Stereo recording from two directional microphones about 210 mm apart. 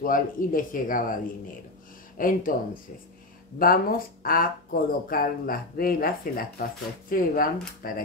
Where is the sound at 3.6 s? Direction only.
45° left (ahead or behind).